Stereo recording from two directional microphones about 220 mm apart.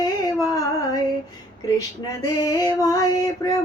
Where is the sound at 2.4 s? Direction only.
15° left (ahead or behind).